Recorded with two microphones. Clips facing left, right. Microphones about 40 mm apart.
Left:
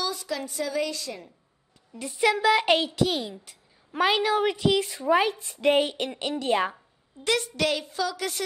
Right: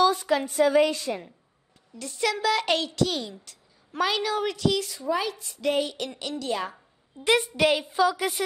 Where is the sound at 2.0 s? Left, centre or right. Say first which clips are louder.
Left 3 dB; centre.